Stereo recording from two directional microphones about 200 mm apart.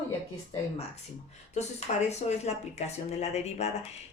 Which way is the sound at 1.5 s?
35° left (ahead or behind).